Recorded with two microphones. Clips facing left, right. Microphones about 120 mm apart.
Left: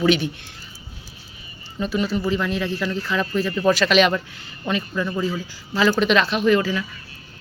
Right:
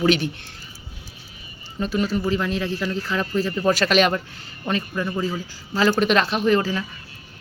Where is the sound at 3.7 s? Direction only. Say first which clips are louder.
Left 1 dB; 40° right (ahead or behind).